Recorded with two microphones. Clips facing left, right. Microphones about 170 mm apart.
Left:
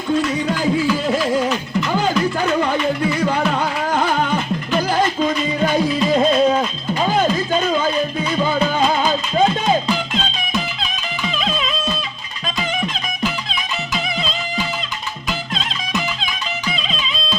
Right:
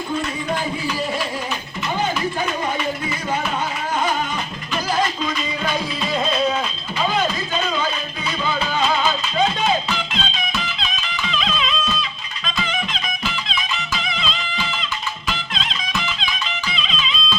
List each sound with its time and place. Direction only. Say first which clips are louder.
1.0 s music: left 7 dB; 90° left
3.9 s music: left 3 dB; 70° left (ahead or behind)
5.2 s music: left 6 dB; 50° left (ahead or behind)
8.4 s music: left 2 dB; 50° left (ahead or behind)
12.6 s music: left 3 dB; 45° left (ahead or behind)
16.7 s music: left 2 dB; 45° left (ahead or behind)